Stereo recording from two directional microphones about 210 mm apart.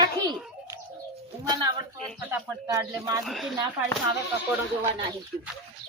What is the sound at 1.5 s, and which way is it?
A man's voice, 20° right (ahead or behind).